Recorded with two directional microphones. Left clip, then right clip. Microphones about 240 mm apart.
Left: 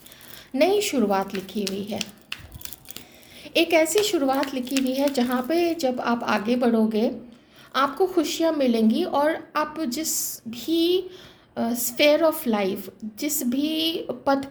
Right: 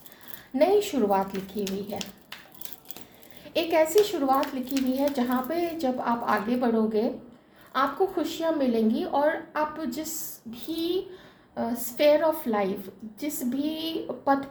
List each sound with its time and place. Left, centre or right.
0.5 s a woman's voice: left
3.4 s a woman's voice: left